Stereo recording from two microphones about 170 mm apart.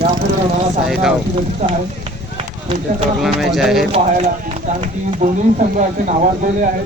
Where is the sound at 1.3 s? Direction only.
35° right (ahead or behind).